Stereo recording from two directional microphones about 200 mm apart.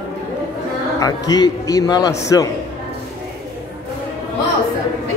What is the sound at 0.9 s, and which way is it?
A man's voice, 20° left (ahead or behind).